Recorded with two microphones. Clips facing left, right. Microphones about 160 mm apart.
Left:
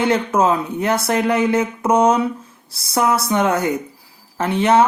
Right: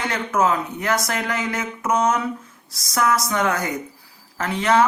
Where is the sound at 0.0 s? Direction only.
30° left (ahead or behind).